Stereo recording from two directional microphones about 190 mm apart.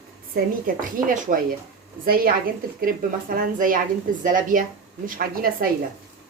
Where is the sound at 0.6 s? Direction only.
45° right (ahead or behind).